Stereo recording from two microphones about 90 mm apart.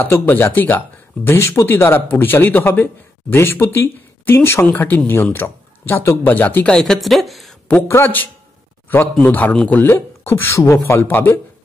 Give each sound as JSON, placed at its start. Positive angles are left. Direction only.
{"t": 0.0, "sound": "speech", "side_deg": 25}
{"t": 6.7, "sound": "a woman's voice", "side_deg": 5}
{"t": 7.9, "sound": "speech", "side_deg": 20}